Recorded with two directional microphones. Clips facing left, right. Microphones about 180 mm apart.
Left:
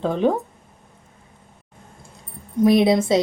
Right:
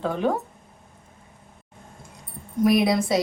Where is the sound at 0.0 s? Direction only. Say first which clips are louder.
Left 4 dB; 20° left (ahead or behind).